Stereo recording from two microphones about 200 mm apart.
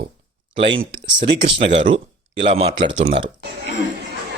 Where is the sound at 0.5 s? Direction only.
25° right (ahead or behind).